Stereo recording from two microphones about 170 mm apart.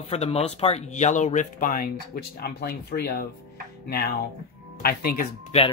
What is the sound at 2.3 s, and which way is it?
Speech, 65° left (ahead or behind).